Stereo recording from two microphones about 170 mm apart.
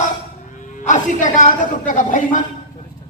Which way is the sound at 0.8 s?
45° left (ahead or behind).